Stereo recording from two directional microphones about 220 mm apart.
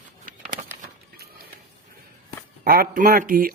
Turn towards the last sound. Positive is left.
turn(degrees=-40)  # may be behind; listen again after turning